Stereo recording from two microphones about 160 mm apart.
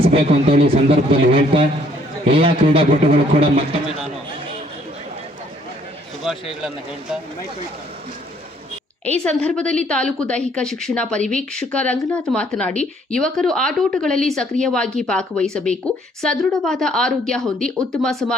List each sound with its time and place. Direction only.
0.0 s a man's voice: 35° right (ahead or behind)
6.3 s a woman's voice: centre (ahead or behind)
9.0 s a woman's voice: 5° left (ahead or behind)